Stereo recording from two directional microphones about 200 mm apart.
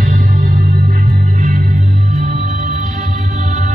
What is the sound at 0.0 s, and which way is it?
Music, 45° right (ahead or behind).